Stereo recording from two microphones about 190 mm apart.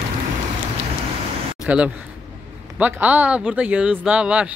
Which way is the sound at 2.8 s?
10° right (ahead or behind).